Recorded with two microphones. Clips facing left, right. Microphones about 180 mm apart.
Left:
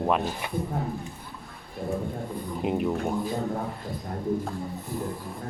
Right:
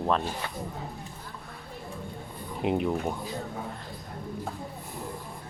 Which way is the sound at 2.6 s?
Centre (ahead or behind).